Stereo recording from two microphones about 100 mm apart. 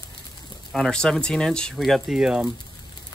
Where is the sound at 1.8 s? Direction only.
5° right (ahead or behind).